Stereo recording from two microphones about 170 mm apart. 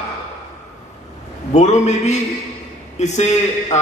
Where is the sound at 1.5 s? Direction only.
40° left (ahead or behind).